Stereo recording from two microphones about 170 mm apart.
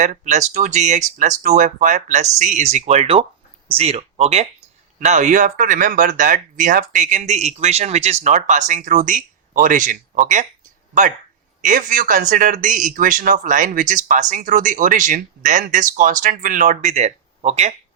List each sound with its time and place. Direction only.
0.0 s speech: 45° right (ahead or behind)
11.6 s speech: 50° right (ahead or behind)